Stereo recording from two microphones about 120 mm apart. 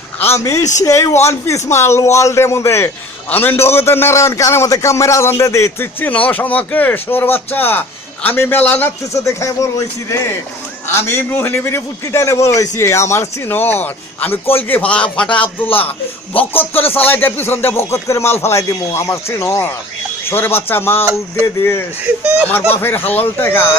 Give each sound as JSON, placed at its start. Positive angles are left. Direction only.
{"t": 0.2, "sound": "a man's voice", "side_deg": 25}
{"t": 0.6, "sound": "a man's voice", "side_deg": 90}
{"t": 0.9, "sound": "a man's voice", "side_deg": 25}
{"t": 9.1, "sound": "a man's voice", "side_deg": 25}